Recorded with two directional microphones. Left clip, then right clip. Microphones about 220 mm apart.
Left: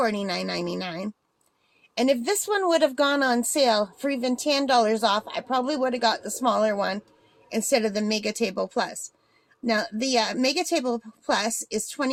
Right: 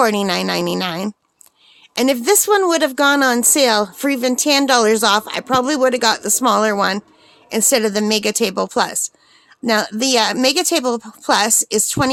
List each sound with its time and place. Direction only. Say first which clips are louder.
0.0 s speech: right 10 dB; 35° right (ahead or behind)